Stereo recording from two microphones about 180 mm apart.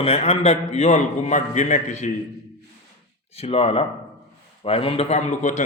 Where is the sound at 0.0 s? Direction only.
35° left (ahead or behind).